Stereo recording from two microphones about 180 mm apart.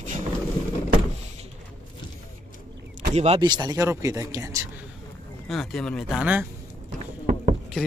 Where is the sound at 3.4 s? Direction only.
25° right (ahead or behind).